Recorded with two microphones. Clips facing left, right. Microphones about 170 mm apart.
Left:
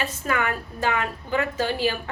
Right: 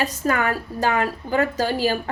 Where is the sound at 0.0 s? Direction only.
40° right (ahead or behind).